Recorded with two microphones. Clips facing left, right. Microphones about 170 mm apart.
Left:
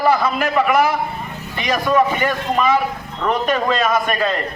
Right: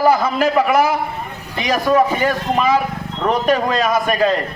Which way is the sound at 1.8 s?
35° right (ahead or behind).